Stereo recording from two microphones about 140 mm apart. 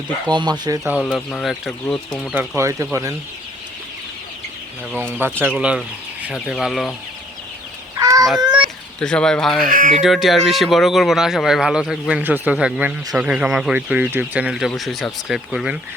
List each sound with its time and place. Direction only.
0.3 s speech: 30° right (ahead or behind)
1.0 s speech: 10° left (ahead or behind)
2.6 s speech: 20° right (ahead or behind)
4.9 s speech: 15° right (ahead or behind)
7.9 s fowl: 25° right (ahead or behind)
9.0 s speech: 5° left (ahead or behind)
9.6 s speech: 75° right (ahead or behind)
10.0 s speech: centre (ahead or behind)